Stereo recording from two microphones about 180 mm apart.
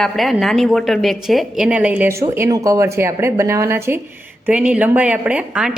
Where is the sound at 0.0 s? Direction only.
Centre (ahead or behind).